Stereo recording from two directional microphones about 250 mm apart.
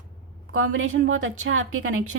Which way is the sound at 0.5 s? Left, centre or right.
Right.